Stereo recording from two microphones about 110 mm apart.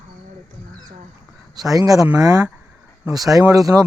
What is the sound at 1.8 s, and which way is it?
Speech, 30° right (ahead or behind).